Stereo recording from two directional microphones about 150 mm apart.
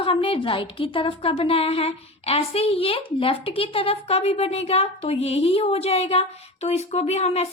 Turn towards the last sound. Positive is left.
turn(degrees=45)  # may be behind; listen again after turning